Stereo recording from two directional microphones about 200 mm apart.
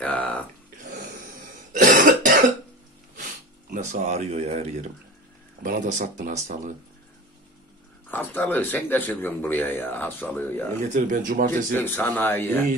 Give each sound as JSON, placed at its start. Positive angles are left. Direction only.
{"t": 0.0, "sound": "a sound", "side_deg": 5}
{"t": 1.7, "sound": "cough", "side_deg": -40}
{"t": 3.7, "sound": "speech", "side_deg": -35}
{"t": 8.1, "sound": "speech", "side_deg": 10}
{"t": 10.9, "sound": "speech", "side_deg": -40}
{"t": 11.7, "sound": "speech", "side_deg": 10}